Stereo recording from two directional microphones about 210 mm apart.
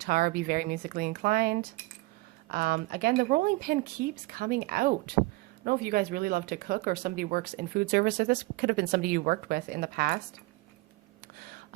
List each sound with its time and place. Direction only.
0.0 s speech: 45° right (ahead or behind)